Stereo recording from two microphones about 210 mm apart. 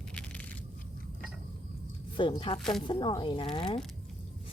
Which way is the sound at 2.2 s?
25° left (ahead or behind).